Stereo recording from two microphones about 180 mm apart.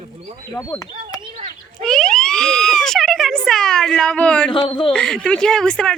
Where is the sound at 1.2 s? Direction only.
35° right (ahead or behind).